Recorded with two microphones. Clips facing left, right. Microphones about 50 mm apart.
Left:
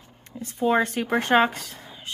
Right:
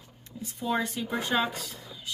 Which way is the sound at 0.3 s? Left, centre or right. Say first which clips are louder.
Left 8 dB; left.